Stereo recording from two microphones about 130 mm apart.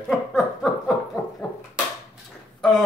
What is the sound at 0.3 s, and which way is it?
Chuckle, centre (ahead or behind).